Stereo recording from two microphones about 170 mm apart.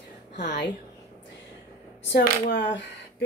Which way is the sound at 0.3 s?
85° left.